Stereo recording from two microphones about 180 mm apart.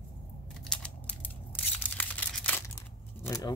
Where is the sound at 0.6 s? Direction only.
5° left (ahead or behind).